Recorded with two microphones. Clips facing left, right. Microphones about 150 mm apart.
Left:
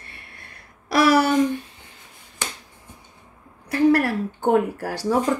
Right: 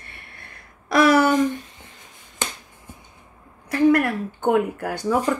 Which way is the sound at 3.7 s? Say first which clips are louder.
Even; 30° left (ahead or behind).